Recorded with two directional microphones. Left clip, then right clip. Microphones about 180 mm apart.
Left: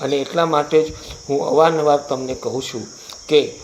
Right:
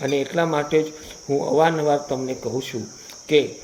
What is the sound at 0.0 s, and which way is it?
Speech, 15° right (ahead or behind).